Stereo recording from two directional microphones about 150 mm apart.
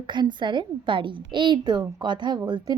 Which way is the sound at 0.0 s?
30° right (ahead or behind).